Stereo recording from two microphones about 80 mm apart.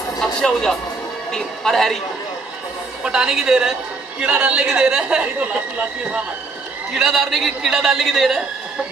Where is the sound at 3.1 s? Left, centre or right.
Centre.